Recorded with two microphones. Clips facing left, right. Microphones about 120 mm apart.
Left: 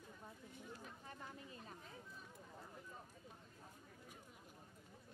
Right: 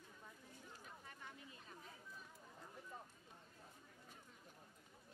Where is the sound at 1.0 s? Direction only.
35° left (ahead or behind).